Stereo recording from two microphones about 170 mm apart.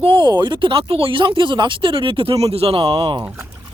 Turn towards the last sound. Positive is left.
turn(degrees=-35)  # may be behind; listen again after turning